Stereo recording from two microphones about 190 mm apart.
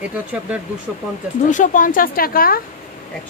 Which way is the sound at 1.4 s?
45° left (ahead or behind).